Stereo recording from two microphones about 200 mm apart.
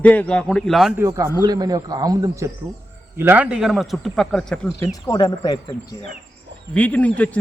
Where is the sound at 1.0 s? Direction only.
15° right (ahead or behind); by 4.9 s 5° left (ahead or behind).